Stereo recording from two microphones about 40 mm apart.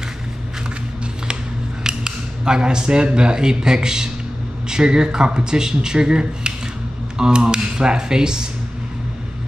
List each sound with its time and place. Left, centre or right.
1.8 s speech: centre